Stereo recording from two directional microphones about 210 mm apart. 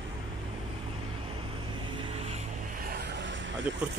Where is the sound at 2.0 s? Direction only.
30° right (ahead or behind).